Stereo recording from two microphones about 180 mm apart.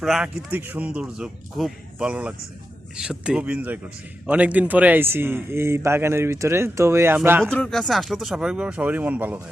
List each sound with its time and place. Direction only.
0.0 s a man's voice: 5° right (ahead or behind)
7.5 s speech: 5° left (ahead or behind)